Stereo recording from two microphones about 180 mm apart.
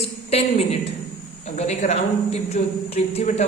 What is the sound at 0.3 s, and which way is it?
A woman's voice, 35° left (ahead or behind).